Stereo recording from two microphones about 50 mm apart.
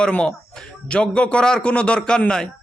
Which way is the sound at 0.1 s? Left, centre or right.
Centre.